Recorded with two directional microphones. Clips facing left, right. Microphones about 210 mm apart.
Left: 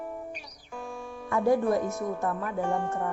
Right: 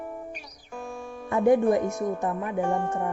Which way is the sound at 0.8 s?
45° right (ahead or behind).